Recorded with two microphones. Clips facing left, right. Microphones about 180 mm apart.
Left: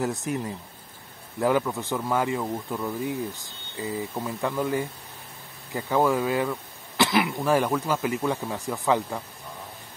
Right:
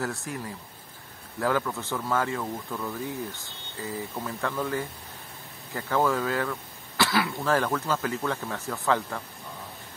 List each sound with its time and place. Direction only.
0.0 s speech: 20° left (ahead or behind)